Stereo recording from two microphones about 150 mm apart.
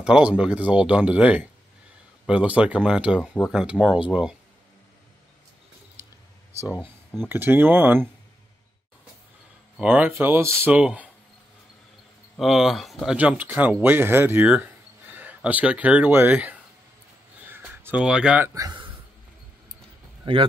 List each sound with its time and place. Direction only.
0.0 s speech: 5° right (ahead or behind)
6.8 s speech: 5° left (ahead or behind)
7.2 s speech: 15° right (ahead or behind)
9.8 s speech: 10° right (ahead or behind)
12.4 s speech: centre (ahead or behind)
17.5 s a sound: 15° right (ahead or behind)
18.5 s speech: 20° right (ahead or behind)